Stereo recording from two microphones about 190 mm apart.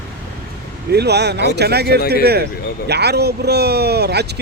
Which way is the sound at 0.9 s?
60° right (ahead or behind).